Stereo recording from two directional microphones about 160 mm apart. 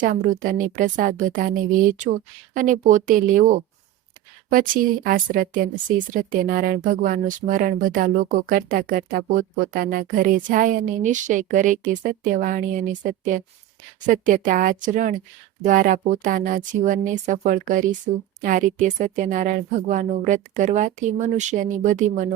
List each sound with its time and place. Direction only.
0.0 s a woman's voice: 60° right (ahead or behind)
4.4 s a woman's voice: 60° right (ahead or behind)